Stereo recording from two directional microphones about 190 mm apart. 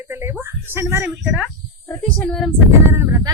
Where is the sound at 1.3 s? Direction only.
10° left (ahead or behind).